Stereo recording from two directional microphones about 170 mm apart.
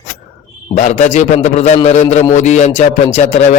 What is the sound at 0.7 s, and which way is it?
A man's voice, 45° left (ahead or behind).